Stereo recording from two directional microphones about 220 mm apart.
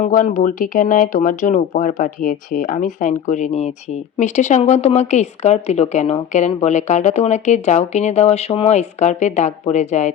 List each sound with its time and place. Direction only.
0.0 s speech: 35° left (ahead or behind)